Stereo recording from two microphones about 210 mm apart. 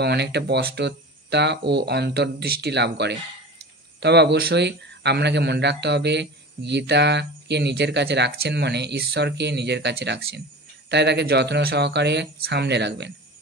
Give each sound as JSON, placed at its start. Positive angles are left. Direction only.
{"t": 0.0, "sound": "speech", "side_deg": -50}